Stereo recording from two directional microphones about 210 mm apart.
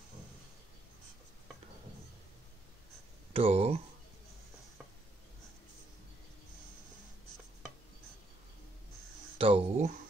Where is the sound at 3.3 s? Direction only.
30° right (ahead or behind).